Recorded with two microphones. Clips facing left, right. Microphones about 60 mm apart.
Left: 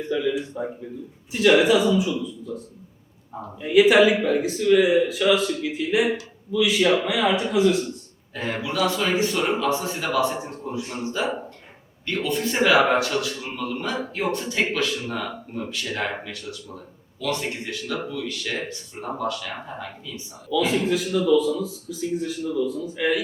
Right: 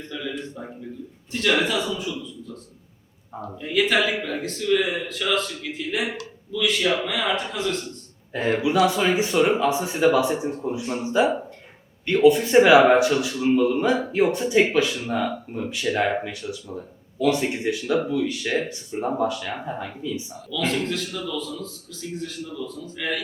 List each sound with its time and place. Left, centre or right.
0.0 s a man's voice: centre
3.6 s a man's voice: centre
8.3 s a man's voice: centre
20.5 s a man's voice: centre